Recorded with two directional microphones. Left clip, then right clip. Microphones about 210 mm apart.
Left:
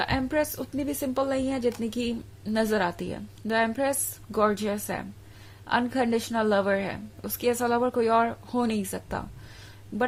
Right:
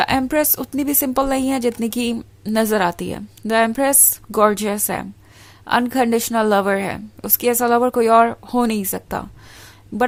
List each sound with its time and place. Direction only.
0.0 s a woman's voice: 35° right (ahead or behind)